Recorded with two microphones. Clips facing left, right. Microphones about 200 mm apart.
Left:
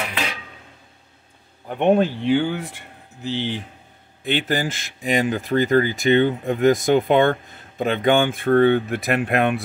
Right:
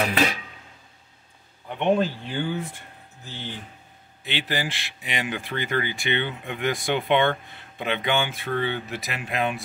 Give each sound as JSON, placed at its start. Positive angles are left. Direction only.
{"t": 1.7, "sound": "speech", "side_deg": 50}
{"t": 2.2, "sound": "speech", "side_deg": 75}
{"t": 4.2, "sound": "speech", "side_deg": 50}